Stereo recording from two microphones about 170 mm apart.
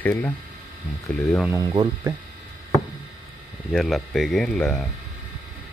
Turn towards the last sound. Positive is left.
turn(degrees=5)  # may be behind; listen again after turning